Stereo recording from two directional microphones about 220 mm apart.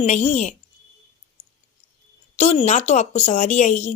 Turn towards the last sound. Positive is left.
turn(degrees=35)  # may be behind; listen again after turning